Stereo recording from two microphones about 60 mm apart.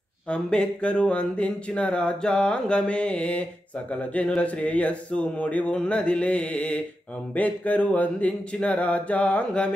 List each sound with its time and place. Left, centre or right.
0.3 s speech: centre